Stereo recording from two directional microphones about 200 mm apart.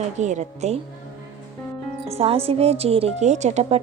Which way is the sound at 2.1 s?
30° right (ahead or behind).